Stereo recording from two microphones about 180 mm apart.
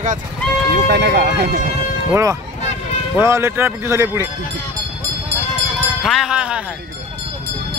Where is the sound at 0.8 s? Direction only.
65° right (ahead or behind).